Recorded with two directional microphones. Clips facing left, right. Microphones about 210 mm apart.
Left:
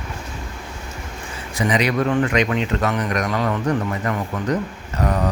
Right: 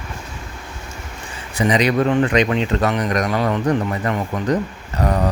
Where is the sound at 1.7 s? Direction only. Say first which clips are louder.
Right 3 dB; 30° right (ahead or behind).